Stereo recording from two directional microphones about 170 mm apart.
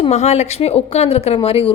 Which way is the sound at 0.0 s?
40° left (ahead or behind).